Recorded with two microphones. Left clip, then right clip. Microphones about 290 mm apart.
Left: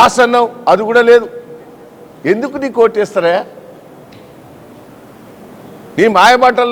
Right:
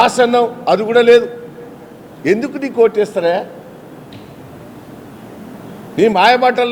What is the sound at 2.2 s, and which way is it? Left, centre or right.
A man's voice, left.